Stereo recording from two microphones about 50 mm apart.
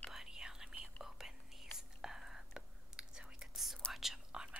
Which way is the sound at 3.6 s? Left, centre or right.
Centre.